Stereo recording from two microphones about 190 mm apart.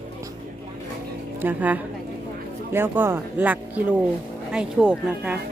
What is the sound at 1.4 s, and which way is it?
A woman's voice, 10° right (ahead or behind).